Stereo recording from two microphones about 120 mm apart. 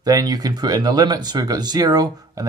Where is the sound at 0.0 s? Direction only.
35° right (ahead or behind).